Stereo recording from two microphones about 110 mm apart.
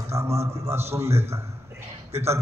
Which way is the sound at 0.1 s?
25° right (ahead or behind).